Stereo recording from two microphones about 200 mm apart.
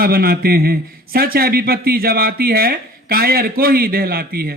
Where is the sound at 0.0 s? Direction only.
50° right (ahead or behind).